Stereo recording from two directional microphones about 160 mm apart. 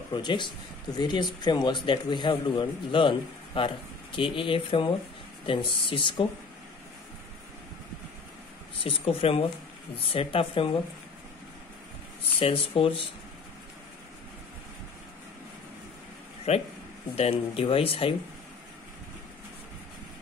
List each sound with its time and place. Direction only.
0.1 s speech: 30° left (ahead or behind)
8.8 s speech: 35° left (ahead or behind)
12.4 s speech: 35° left (ahead or behind)
16.5 s speech: 40° left (ahead or behind)